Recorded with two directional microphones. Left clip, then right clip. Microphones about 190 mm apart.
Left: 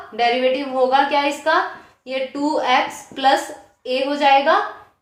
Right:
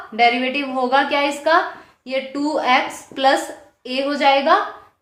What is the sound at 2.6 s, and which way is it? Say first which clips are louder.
A woman's voice: right 1 dB; 25° right (ahead or behind).